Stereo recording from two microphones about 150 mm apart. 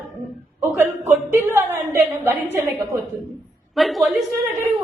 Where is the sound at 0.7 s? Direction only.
15° right (ahead or behind).